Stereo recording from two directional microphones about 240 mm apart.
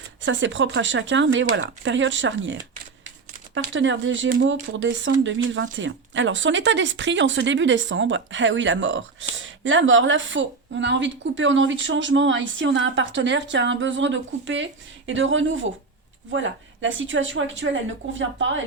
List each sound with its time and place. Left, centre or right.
0.2 s speech: right